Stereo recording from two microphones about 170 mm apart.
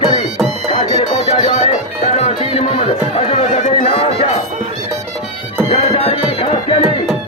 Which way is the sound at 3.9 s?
35° left (ahead or behind).